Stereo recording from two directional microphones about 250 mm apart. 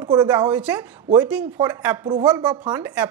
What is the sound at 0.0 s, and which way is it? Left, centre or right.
Speech, centre.